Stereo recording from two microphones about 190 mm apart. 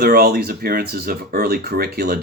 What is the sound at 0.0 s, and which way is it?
Speech, 55° right (ahead or behind).